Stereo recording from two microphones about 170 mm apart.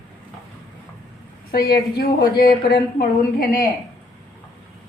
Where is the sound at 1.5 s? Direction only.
65° left (ahead or behind).